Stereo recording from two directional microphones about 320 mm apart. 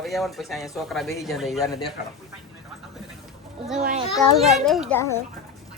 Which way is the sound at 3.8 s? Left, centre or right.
Centre.